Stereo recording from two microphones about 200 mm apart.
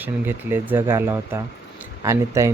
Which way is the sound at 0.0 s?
10° right (ahead or behind).